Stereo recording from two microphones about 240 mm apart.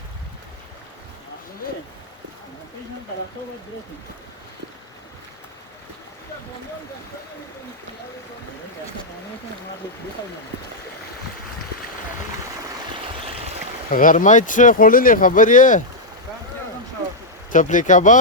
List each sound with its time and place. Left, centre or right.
13.9 s speech: left
17.5 s speech: left